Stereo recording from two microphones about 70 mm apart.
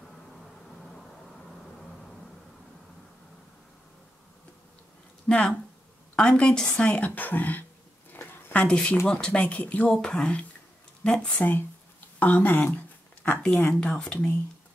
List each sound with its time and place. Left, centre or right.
5.3 s speech: centre
8.1 s a sound: left
8.6 s speech: centre
11.3 s speech: left
12.2 s a sound: left
13.7 s speech: centre